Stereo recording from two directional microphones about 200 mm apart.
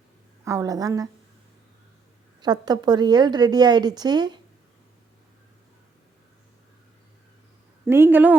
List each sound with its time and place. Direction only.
0.4 s a woman's voice: 15° right (ahead or behind)
2.4 s a woman's voice: 20° right (ahead or behind)
7.9 s a woman's voice: 10° right (ahead or behind)